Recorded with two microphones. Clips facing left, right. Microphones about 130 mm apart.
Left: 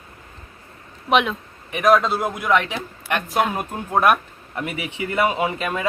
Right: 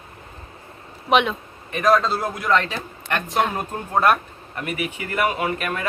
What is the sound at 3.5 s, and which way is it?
A man's voice, 15° left (ahead or behind).